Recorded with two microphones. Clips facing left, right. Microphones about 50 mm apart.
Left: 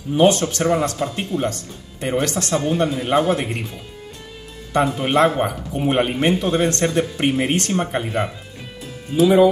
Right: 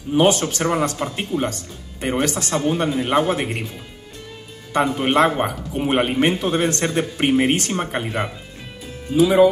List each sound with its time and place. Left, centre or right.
0.1 s speech: centre
0.4 s speech: centre
4.9 s speech: centre